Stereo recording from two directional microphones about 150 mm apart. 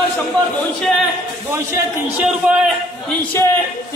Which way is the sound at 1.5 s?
15° right (ahead or behind).